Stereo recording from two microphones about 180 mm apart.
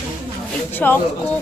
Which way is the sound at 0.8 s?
10° left (ahead or behind).